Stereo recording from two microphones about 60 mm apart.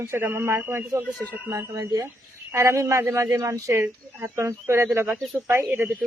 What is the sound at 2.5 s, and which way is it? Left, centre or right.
Speech, right.